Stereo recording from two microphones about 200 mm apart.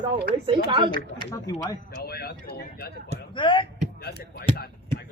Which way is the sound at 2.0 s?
50° left (ahead or behind).